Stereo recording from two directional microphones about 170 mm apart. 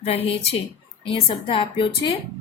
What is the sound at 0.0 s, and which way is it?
Speech, 40° left (ahead or behind).